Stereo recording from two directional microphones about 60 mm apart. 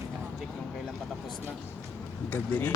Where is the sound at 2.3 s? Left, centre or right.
Left.